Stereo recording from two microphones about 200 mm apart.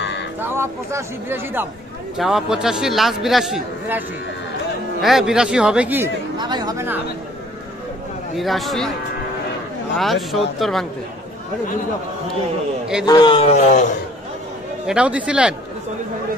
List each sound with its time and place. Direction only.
0.4 s a man's voice: 10° right (ahead or behind)
5.0 s a man's voice: centre (ahead or behind)
6.3 s speech: 20° right (ahead or behind)
8.4 s a man's voice: centre (ahead or behind)
9.9 s a man's voice: centre (ahead or behind)
13.0 s a man's voice: 20° left (ahead or behind); by 13.8 s 40° left (ahead or behind)
14.9 s a man's voice: 5° right (ahead or behind)